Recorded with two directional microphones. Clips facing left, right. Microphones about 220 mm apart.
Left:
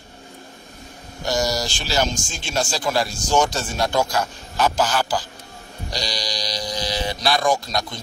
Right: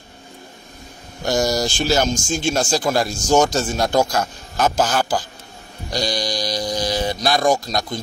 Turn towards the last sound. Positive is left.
turn(degrees=-40)  # may be behind; listen again after turning